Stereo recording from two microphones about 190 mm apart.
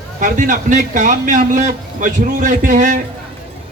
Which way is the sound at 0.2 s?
45° right (ahead or behind).